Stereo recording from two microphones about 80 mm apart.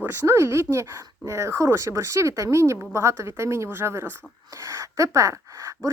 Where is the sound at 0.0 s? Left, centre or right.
Right.